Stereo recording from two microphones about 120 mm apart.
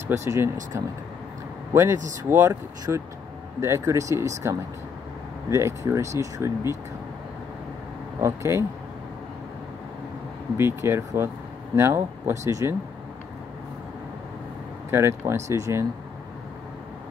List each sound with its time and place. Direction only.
0.1 s speech: 25° right (ahead or behind)
8.2 s speech: 25° right (ahead or behind)
10.6 s speech: 20° right (ahead or behind)
14.9 s speech: 20° right (ahead or behind)